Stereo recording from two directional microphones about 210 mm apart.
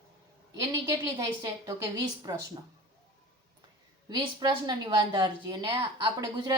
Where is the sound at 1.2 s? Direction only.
15° right (ahead or behind).